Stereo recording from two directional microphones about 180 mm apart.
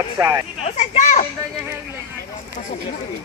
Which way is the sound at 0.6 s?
35° left (ahead or behind).